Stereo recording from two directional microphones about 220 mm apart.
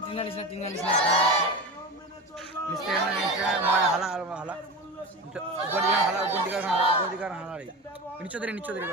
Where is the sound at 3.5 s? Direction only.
5° right (ahead or behind).